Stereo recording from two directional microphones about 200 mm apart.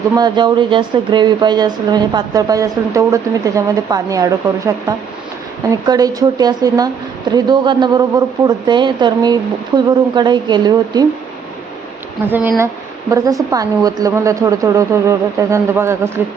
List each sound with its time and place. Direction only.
0.2 s speech: 25° right (ahead or behind)
12.3 s a woman's voice: 10° right (ahead or behind)